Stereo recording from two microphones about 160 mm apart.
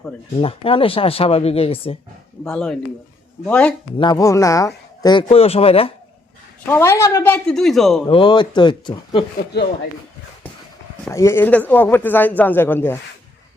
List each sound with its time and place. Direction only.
0.4 s speech: 35° left (ahead or behind)
2.4 s a woman's voice: 5° left (ahead or behind)
3.9 s speech: 30° left (ahead or behind)
5.3 s speech: 40° left (ahead or behind)
6.7 s a woman's voice: 15° left (ahead or behind)
8.0 s speech: 30° left (ahead or behind)
9.5 s speech: 90° left
11.1 s a woman's voice: 15° left (ahead or behind)